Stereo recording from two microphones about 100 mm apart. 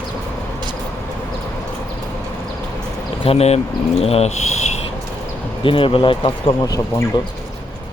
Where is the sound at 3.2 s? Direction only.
90° left.